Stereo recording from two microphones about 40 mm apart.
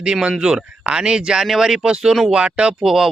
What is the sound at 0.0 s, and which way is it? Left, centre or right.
Speech, right.